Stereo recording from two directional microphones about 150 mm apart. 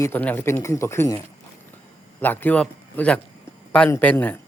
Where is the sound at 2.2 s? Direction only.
15° left (ahead or behind).